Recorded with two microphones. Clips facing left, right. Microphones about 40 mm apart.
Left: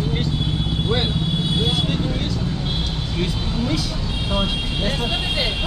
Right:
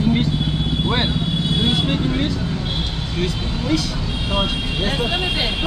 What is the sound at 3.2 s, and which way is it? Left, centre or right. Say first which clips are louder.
Speech: right 1 dB; centre.